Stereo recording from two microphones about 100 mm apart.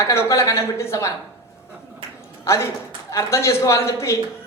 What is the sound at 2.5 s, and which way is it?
Speech, 25° left (ahead or behind).